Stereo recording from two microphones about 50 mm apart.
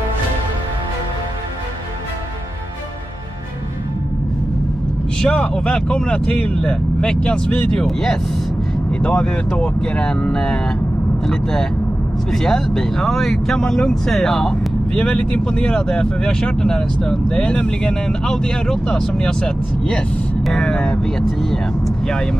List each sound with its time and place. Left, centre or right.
5.3 s speech: left
8.9 s speech: left